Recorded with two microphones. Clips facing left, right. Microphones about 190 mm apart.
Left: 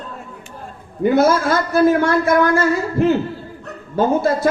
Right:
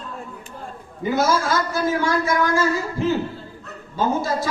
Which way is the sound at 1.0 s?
60° left (ahead or behind).